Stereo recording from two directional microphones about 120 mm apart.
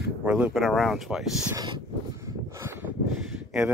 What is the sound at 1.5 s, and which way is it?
Speech, 35° right (ahead or behind).